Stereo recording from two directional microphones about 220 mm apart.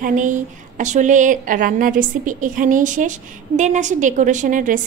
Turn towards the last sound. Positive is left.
turn(degrees=-35)  # may be behind; listen again after turning